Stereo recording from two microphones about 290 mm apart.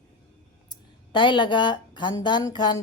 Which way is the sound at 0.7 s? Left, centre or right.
Centre.